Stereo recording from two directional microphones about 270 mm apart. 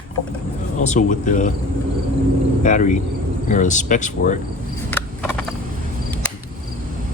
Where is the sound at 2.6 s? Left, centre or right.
Left.